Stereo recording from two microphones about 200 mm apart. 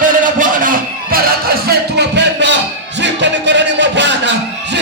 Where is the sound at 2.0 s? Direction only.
60° right (ahead or behind).